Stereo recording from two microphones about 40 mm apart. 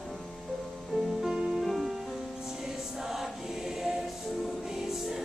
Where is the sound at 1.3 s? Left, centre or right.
Right.